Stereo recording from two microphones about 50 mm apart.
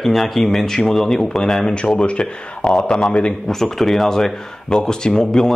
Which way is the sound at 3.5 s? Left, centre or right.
Centre.